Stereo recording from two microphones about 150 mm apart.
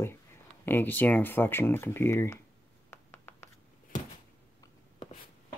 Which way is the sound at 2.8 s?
15° left (ahead or behind).